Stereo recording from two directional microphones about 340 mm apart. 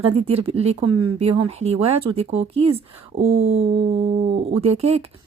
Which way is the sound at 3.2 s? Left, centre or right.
Right.